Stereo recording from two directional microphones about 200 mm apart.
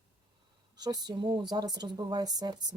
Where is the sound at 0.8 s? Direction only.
20° right (ahead or behind).